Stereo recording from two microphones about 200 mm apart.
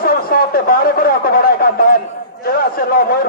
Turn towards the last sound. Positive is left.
turn(degrees=45)  # may be behind; listen again after turning